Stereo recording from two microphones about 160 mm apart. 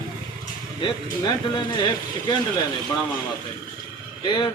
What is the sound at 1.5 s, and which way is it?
Speech, 30° left (ahead or behind).